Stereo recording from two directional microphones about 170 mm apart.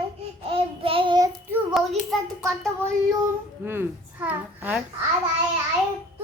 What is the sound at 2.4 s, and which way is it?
Child singing, 15° right (ahead or behind).